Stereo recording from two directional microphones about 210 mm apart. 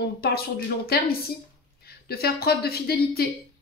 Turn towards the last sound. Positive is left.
turn(degrees=45)  # may be behind; listen again after turning